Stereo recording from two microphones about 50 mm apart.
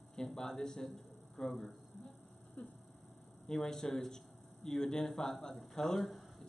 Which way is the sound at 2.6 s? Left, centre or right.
Left.